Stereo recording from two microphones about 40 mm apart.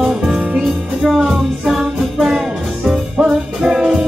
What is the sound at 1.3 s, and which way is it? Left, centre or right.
Music, centre.